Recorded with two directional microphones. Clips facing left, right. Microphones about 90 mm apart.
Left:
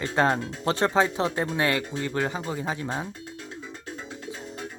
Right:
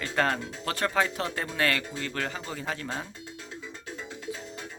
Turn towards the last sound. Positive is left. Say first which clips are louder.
# left 4 dB
turn(degrees=20)  # may be behind; listen again after turning